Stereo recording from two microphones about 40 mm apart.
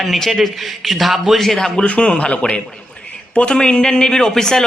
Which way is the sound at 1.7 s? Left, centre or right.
Left.